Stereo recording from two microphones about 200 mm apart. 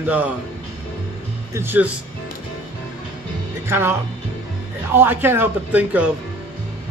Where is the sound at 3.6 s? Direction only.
10° right (ahead or behind).